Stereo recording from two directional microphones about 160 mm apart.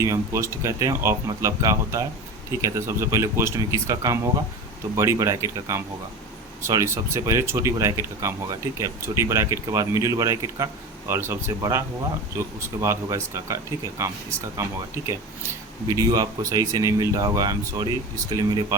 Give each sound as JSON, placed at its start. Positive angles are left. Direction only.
{"t": 0.0, "sound": "speech", "side_deg": -20}